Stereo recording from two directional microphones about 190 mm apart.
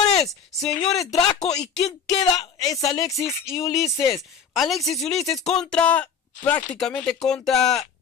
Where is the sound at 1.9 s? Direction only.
20° left (ahead or behind).